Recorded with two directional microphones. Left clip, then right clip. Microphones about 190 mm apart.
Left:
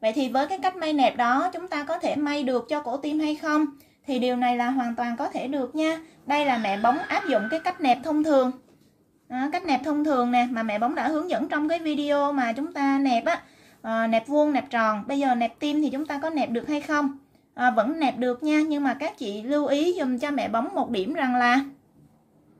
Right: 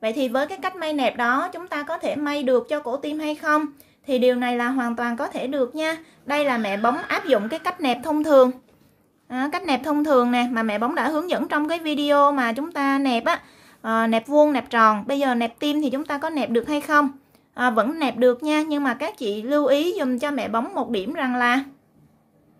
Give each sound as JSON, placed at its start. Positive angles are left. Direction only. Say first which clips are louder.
{"t": 0.0, "sound": "a woman's voice", "louder": "right 1 dB", "side_deg": -20}